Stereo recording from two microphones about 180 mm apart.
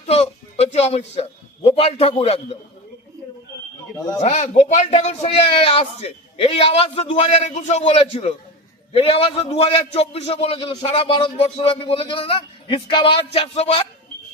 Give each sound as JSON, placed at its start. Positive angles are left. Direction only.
{"t": 0.0, "sound": "speech", "side_deg": 35}
{"t": 4.2, "sound": "a man's voice", "side_deg": 40}